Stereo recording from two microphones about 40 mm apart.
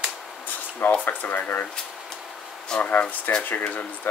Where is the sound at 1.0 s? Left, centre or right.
Left.